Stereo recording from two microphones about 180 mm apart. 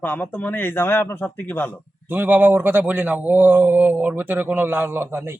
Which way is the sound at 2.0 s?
10° right (ahead or behind).